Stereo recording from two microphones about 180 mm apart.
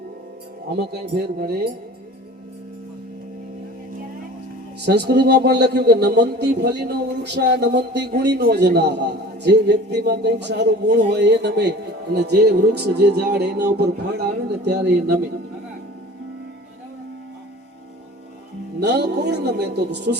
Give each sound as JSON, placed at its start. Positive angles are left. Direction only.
{"t": 0.7, "sound": "a man's voice", "side_deg": -65}
{"t": 4.9, "sound": "speech", "side_deg": -70}
{"t": 18.8, "sound": "speech", "side_deg": -65}